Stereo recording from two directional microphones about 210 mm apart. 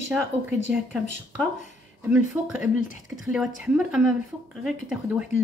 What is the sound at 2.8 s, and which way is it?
Speech, 70° right (ahead or behind).